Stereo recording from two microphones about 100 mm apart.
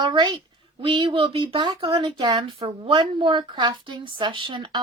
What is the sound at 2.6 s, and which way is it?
Speech, 55° right (ahead or behind).